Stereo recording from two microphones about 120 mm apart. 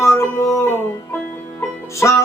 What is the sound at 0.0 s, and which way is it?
Music, 25° left (ahead or behind).